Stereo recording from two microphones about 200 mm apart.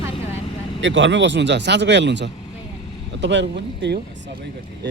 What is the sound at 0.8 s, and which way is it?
Speech, 65° right (ahead or behind).